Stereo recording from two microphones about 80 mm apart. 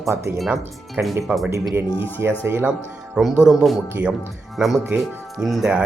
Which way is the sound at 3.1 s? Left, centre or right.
Centre.